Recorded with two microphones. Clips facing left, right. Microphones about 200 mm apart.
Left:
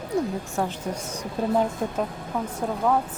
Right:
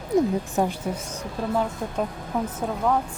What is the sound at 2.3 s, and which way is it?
Speech, 15° right (ahead or behind).